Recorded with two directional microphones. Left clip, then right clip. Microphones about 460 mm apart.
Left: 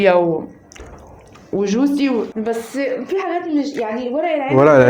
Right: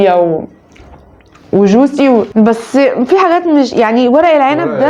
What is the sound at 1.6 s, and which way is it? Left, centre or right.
Speech, centre.